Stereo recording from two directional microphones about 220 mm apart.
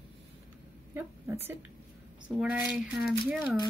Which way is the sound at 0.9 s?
10° right (ahead or behind).